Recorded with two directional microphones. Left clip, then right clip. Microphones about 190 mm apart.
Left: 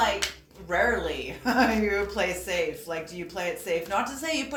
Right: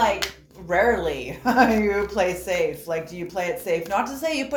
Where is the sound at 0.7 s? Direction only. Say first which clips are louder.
Right 5 dB; 40° right (ahead or behind).